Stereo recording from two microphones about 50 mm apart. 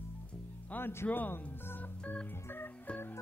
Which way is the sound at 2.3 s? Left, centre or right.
Left.